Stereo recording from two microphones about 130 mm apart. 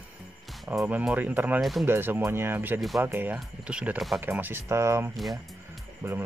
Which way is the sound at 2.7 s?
Centre (ahead or behind).